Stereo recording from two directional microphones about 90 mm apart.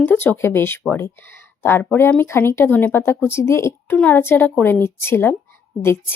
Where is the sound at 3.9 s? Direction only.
20° left (ahead or behind).